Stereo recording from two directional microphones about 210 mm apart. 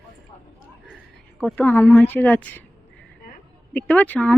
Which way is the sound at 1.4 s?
5° left (ahead or behind).